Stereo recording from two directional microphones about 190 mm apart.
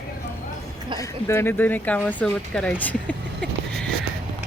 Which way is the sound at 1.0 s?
15° left (ahead or behind).